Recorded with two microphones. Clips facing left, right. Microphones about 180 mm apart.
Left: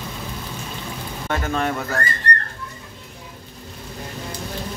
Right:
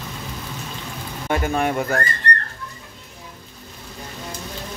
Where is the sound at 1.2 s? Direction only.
10° right (ahead or behind).